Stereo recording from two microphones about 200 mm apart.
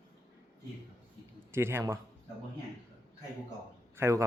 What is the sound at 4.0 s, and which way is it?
Speech, 15° right (ahead or behind).